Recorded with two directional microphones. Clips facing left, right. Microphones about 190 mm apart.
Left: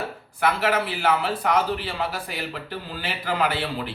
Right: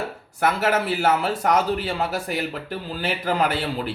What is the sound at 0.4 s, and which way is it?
A man's voice, 45° right (ahead or behind).